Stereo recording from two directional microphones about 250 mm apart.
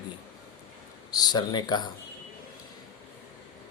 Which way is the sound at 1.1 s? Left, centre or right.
Centre.